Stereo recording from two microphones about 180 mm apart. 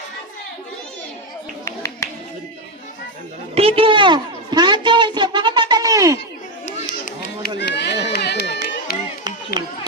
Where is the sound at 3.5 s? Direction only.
30° right (ahead or behind).